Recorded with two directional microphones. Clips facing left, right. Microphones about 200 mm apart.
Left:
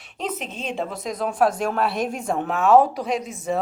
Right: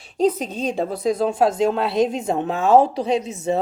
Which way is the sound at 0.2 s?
35° right (ahead or behind).